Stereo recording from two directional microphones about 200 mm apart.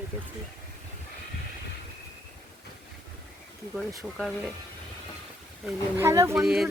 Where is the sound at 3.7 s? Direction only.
5° right (ahead or behind).